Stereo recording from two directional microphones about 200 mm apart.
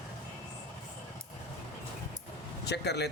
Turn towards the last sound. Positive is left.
turn(degrees=55)  # may be behind; listen again after turning